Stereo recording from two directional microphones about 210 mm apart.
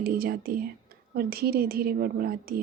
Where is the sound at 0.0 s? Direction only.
45° right (ahead or behind).